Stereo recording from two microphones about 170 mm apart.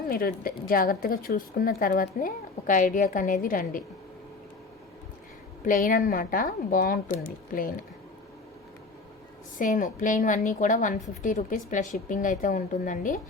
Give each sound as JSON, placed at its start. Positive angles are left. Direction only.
{"t": 0.1, "sound": "a woman's voice", "side_deg": 60}
{"t": 5.6, "sound": "a woman's voice", "side_deg": 50}
{"t": 9.6, "sound": "a woman's voice", "side_deg": 50}